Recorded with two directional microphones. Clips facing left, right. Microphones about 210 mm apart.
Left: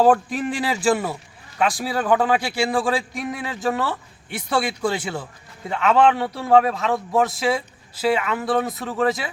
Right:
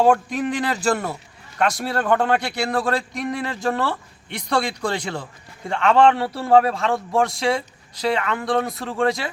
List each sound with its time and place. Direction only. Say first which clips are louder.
0.0 s a man's voice: even; 5° left (ahead or behind)